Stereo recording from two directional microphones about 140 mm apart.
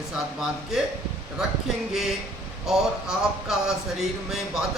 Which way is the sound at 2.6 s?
5° right (ahead or behind).